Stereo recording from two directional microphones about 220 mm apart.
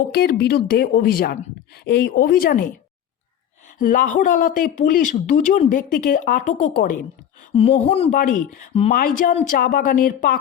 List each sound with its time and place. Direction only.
0.1 s speech: 45° left (ahead or behind)
3.8 s speech: 40° left (ahead or behind)